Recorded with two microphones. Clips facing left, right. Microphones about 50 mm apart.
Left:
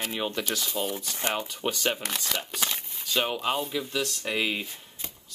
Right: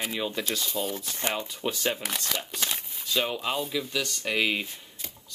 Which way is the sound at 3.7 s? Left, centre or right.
Centre.